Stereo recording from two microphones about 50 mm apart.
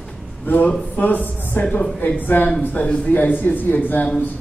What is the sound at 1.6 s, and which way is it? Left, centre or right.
A man's voice, left.